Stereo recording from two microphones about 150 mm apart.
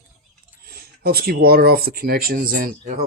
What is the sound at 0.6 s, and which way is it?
Speech, 90° right.